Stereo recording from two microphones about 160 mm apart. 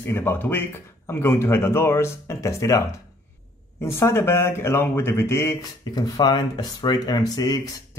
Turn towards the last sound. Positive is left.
turn(degrees=25)  # may be behind; listen again after turning